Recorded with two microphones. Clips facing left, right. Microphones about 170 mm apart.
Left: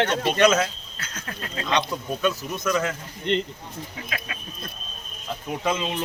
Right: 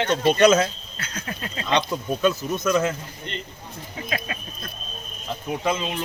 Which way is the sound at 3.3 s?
80° left.